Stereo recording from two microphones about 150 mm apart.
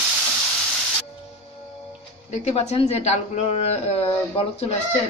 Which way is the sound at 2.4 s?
45° left (ahead or behind).